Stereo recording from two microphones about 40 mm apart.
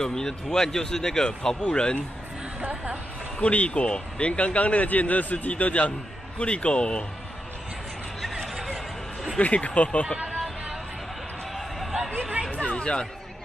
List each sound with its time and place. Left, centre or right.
0.0 s speech: centre
2.6 s a sound: right
3.3 s speech: left
8.7 s a sound: centre
9.4 s speech: left
12.2 s chatter: right
12.5 s chatter: left